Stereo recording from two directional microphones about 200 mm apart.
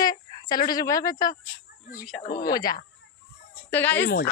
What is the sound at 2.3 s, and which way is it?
Speech, 45° left (ahead or behind).